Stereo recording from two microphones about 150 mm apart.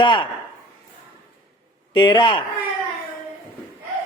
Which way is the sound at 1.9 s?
30° left (ahead or behind).